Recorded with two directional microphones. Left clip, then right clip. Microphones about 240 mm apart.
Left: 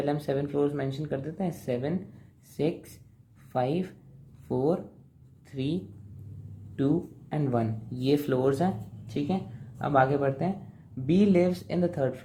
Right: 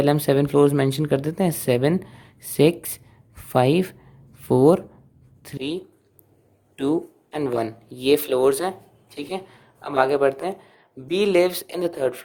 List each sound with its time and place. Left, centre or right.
0.0 s speech: right
5.5 s speech: right
9.9 s speech: right